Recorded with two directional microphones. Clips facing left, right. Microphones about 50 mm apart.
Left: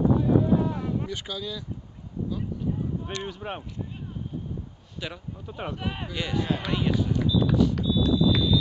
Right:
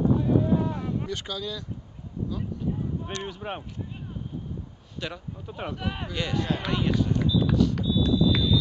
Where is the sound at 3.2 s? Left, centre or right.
Centre.